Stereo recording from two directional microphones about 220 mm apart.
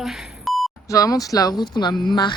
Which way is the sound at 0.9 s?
15° left (ahead or behind).